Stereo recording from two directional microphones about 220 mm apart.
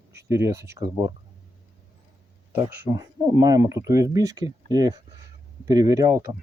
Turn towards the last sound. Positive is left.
turn(degrees=-15)  # may be behind; listen again after turning